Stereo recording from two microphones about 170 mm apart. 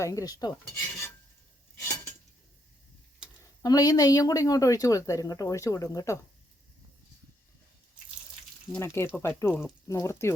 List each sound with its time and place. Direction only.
0.0 s speech: 20° left (ahead or behind)
3.6 s speech: 20° left (ahead or behind)
8.7 s speech: 15° left (ahead or behind)